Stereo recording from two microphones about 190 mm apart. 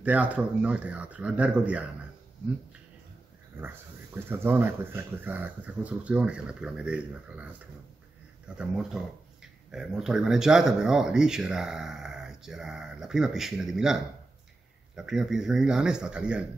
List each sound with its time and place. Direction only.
0.0 s speech: 5° right (ahead or behind)
3.5 s speech: 10° right (ahead or behind)
8.5 s speech: 5° right (ahead or behind)
15.0 s speech: centre (ahead or behind)